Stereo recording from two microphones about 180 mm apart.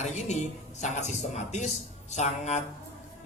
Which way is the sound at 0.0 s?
40° left (ahead or behind).